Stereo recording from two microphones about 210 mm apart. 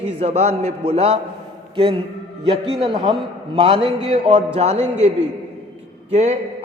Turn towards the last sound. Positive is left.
turn(degrees=-30)  # may be behind; listen again after turning